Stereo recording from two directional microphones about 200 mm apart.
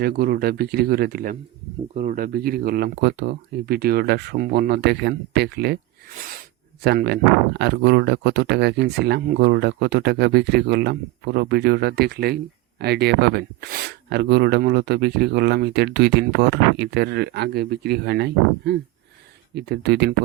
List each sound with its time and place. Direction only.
0.0 s speech: 50° right (ahead or behind)
6.8 s speech: 55° right (ahead or behind)